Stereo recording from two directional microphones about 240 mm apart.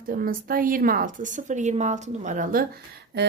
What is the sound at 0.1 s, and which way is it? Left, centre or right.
A woman's voice, right.